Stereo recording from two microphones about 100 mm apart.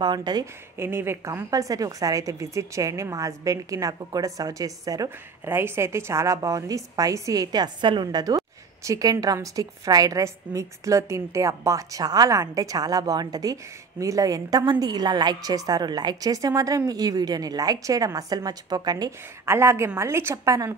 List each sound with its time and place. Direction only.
0.0 s a woman's voice: 45° right (ahead or behind)
0.7 s a woman's voice: 25° right (ahead or behind)
5.4 s a woman's voice: 25° right (ahead or behind); by 19.1 s 40° right (ahead or behind)
19.4 s a woman's voice: 25° right (ahead or behind)